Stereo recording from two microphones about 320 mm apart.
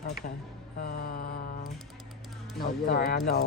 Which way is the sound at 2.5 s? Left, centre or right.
Left.